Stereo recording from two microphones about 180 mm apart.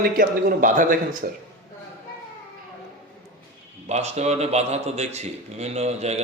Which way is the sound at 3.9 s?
40° right (ahead or behind).